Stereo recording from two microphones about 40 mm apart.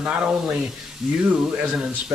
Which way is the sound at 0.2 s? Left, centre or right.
Centre.